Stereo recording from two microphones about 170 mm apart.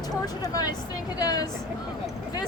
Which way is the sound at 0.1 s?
20° left (ahead or behind).